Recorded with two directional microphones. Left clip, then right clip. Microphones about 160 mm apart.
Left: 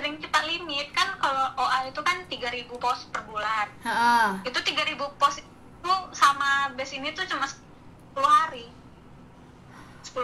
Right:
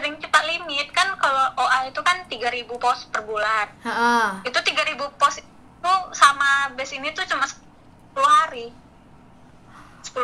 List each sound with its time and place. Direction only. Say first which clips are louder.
0.0 s a sound: right 6 dB; 45° right (ahead or behind)
3.8 s speech: even; 25° right (ahead or behind)
4.4 s a woman's voice: right 5 dB; 45° right (ahead or behind)